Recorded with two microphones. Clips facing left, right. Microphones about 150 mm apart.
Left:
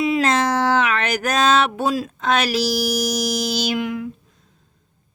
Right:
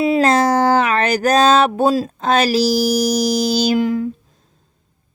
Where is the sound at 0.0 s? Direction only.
35° right (ahead or behind).